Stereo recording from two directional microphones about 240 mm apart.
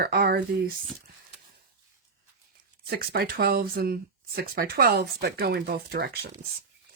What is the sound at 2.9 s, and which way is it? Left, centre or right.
Speech, right.